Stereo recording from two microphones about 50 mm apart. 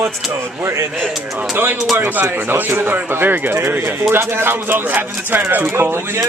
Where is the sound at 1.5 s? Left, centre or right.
Right.